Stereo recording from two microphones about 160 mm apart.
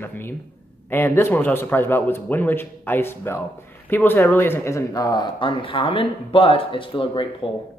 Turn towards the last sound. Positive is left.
turn(degrees=35)  # may be behind; listen again after turning